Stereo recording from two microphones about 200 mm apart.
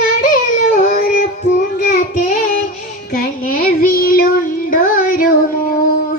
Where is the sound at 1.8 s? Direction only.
40° left (ahead or behind).